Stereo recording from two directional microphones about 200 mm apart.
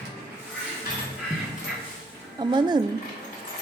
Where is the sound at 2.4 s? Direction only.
20° right (ahead or behind).